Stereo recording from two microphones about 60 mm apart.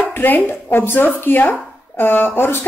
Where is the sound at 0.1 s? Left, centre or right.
Left.